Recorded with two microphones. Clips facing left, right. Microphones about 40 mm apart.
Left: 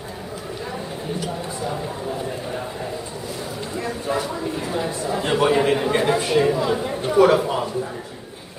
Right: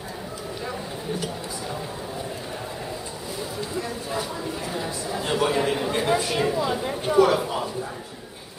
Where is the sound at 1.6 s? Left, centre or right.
Centre.